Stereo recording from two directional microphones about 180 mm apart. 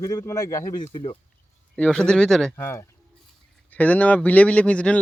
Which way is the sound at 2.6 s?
15° left (ahead or behind).